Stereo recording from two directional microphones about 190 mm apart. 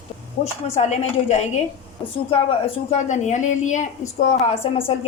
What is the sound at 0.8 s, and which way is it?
A woman's voice, 35° left (ahead or behind).